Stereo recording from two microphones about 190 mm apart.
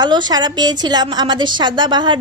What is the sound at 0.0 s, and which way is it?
A woman's voice, 20° right (ahead or behind).